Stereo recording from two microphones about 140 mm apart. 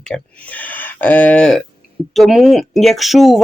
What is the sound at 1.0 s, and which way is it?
Speech, 10° left (ahead or behind).